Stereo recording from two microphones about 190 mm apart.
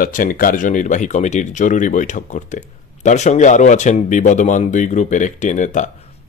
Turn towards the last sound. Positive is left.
turn(degrees=40)  # may be behind; listen again after turning